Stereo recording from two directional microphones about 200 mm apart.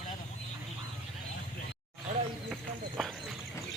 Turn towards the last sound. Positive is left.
turn(degrees=0)  # may be behind; listen again after turning